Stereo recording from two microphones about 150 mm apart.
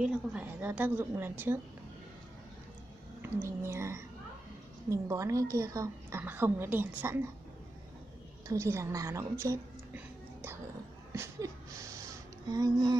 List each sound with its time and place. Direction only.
0.0 s a woman's voice: 10° right (ahead or behind)
3.2 s a woman's voice: 20° right (ahead or behind)
8.5 s a woman's voice: 20° right (ahead or behind)
11.1 s a sound: 20° right (ahead or behind)
12.4 s speech: 25° right (ahead or behind)